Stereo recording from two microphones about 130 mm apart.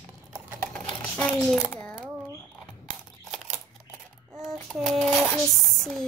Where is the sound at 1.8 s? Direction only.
5° left (ahead or behind).